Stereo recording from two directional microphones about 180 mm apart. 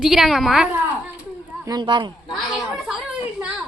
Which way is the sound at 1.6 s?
25° right (ahead or behind).